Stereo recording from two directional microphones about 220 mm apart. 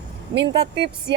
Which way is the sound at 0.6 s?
50° right (ahead or behind).